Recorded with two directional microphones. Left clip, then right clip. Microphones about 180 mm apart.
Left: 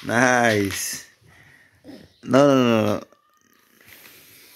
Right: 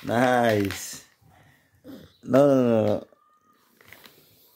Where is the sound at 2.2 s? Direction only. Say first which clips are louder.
Left 3 dB; 5° left (ahead or behind).